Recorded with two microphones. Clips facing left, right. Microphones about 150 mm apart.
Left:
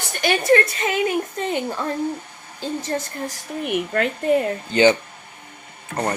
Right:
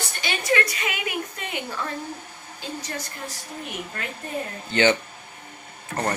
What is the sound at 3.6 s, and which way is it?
Speech, 65° left (ahead or behind).